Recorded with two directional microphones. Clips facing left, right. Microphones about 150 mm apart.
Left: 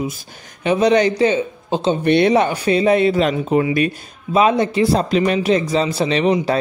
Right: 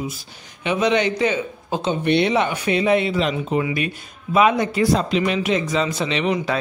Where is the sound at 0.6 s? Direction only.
40° left (ahead or behind).